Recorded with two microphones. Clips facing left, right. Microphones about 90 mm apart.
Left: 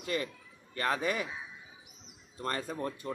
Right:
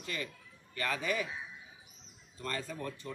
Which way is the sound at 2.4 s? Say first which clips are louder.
Left 4 dB; 45° left (ahead or behind).